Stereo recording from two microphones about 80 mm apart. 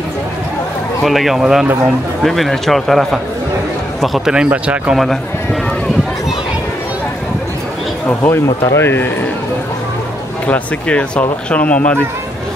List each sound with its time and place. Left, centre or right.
1.0 s speech: centre
4.5 s speech: centre
4.9 s speech: centre
8.1 s a man's voice: left
10.4 s speech: centre